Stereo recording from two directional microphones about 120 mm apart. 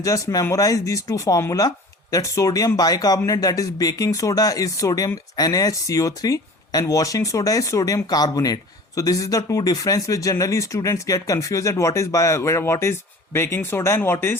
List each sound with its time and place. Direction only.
0.0 s speech: 30° left (ahead or behind)